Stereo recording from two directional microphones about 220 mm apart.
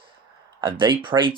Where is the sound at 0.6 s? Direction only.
20° right (ahead or behind).